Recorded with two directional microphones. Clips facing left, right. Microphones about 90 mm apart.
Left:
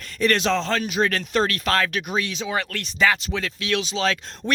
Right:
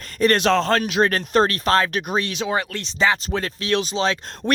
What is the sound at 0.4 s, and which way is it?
Speech, 55° right (ahead or behind).